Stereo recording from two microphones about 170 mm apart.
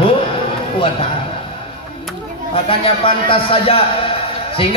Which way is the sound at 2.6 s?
35° left (ahead or behind).